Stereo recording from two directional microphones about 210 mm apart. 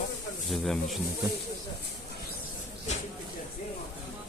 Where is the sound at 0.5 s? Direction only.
Centre (ahead or behind).